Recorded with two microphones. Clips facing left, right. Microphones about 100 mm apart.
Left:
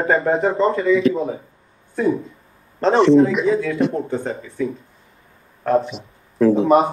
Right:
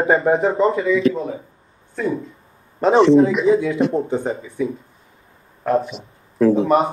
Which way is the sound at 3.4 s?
20° right (ahead or behind).